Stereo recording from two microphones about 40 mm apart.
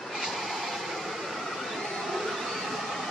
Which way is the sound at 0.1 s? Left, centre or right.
Centre.